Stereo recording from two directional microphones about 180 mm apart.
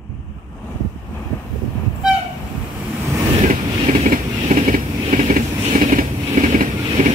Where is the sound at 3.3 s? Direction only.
40° right (ahead or behind).